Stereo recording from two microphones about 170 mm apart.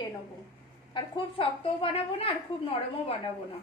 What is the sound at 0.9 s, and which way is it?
A woman's voice, 30° left (ahead or behind).